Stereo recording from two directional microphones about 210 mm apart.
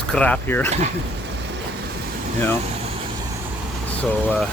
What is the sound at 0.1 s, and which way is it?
Speech, 5° left (ahead or behind).